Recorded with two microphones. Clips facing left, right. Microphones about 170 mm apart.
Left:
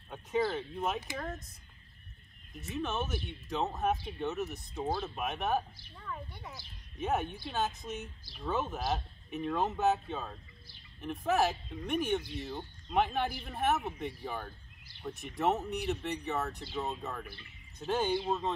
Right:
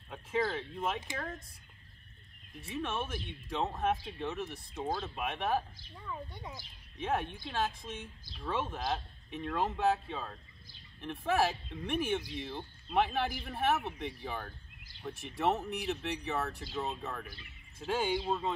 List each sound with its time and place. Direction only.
0.1 s speech: centre (ahead or behind)
2.6 s speech: centre (ahead or behind)
5.9 s speech: 15° right (ahead or behind)
7.0 s speech: centre (ahead or behind)